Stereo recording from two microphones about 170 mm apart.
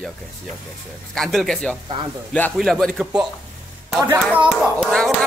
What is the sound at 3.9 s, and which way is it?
Speech, 10° right (ahead or behind).